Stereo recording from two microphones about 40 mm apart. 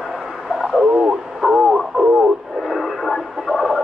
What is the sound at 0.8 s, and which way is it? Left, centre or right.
Radio, right.